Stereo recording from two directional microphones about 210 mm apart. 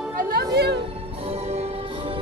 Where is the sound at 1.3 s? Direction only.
30° right (ahead or behind).